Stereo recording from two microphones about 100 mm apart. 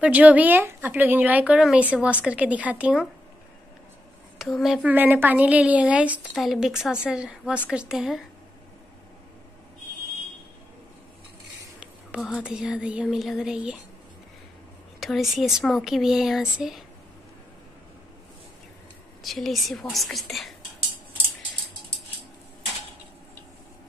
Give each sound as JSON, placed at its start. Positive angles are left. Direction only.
{"t": 0.0, "sound": "speech", "side_deg": -15}
{"t": 4.4, "sound": "speech", "side_deg": 0}
{"t": 4.8, "sound": "speech", "side_deg": -15}
{"t": 6.3, "sound": "speech", "side_deg": 0}
{"t": 11.8, "sound": "a sound", "side_deg": -5}
{"t": 12.4, "sound": "speech", "side_deg": -10}
{"t": 15.0, "sound": "speech", "side_deg": 0}
{"t": 19.2, "sound": "speech", "side_deg": 0}